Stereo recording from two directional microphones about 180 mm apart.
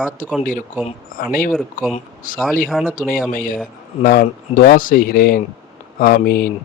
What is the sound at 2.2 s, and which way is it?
Speech, 50° left (ahead or behind).